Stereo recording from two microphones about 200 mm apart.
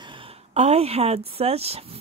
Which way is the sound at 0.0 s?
25° right (ahead or behind).